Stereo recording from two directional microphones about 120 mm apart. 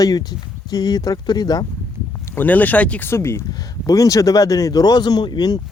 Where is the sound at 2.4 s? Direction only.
15° left (ahead or behind).